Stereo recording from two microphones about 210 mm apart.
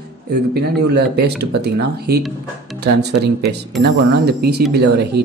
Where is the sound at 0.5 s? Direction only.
50° right (ahead or behind).